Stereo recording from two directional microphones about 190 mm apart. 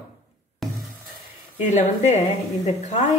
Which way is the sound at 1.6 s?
35° left (ahead or behind).